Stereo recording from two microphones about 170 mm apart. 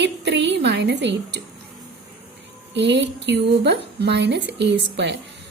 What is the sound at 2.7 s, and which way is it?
A woman's voice, 90° right.